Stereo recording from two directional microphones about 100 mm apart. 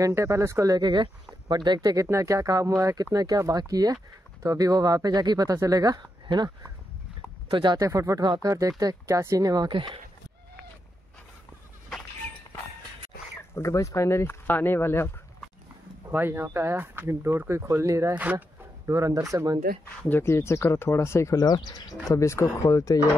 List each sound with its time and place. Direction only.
0.0 s speech: 30° right (ahead or behind); by 7.8 s 55° right (ahead or behind)
7.8 s speech: 30° right (ahead or behind)
9.7 s speech: 50° right (ahead or behind)
13.6 s speech: 30° left (ahead or behind)
16.1 s speech: 20° right (ahead or behind)
18.1 s speech: 15° right (ahead or behind)
18.9 s speech: 35° right (ahead or behind)
20.0 s speech: 20° left (ahead or behind); by 21.8 s 45° left (ahead or behind)
22.1 s speech: 30° left (ahead or behind)